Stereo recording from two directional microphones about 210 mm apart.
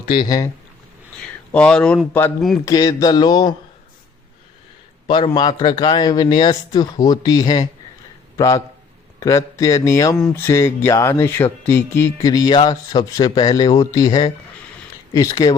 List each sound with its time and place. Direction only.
1.5 s speech: 5° left (ahead or behind)
2.6 s a man's voice: 15° left (ahead or behind)
5.0 s a man's voice: 20° left (ahead or behind)
10.2 s speech: 5° left (ahead or behind)
10.4 s speech: 15° left (ahead or behind)